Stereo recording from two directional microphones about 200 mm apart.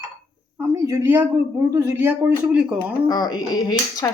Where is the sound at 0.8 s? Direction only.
15° right (ahead or behind).